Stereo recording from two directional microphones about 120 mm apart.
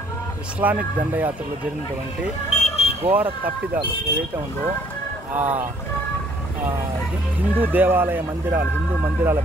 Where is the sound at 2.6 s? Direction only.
60° left (ahead or behind).